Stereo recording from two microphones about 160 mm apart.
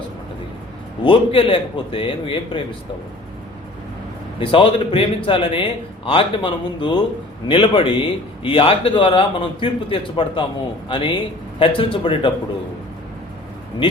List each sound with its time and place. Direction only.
1.0 s a man's voice: 30° left (ahead or behind)
4.4 s a man's voice: 35° left (ahead or behind)